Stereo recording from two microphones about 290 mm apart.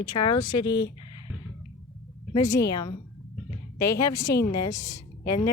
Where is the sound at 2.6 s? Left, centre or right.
Left.